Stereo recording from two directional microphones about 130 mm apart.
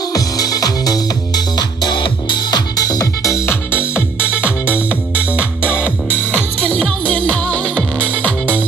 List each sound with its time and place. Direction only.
0.1 s music: 30° left (ahead or behind)
4.2 s music: 10° right (ahead or behind)
6.7 s music: 5° left (ahead or behind)